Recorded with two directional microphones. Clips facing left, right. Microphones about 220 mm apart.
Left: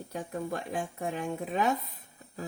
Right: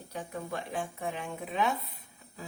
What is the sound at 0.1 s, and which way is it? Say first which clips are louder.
A woman's voice: left 3 dB; 45° left (ahead or behind).